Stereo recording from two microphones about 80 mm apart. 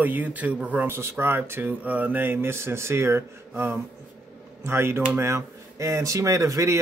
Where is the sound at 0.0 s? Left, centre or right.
Right.